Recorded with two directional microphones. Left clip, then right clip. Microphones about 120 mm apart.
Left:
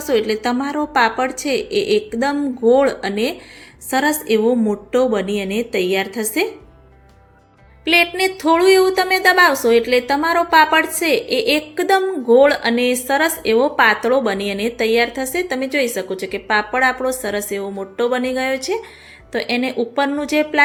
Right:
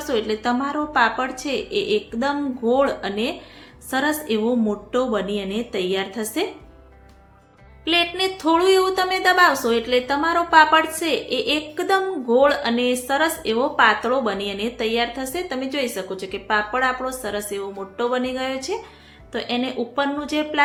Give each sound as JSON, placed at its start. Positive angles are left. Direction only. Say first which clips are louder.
{"t": 0.0, "sound": "a woman's voice", "louder": "left 5 dB", "side_deg": 25}
{"t": 7.9, "sound": "speech", "louder": "left 5 dB", "side_deg": 30}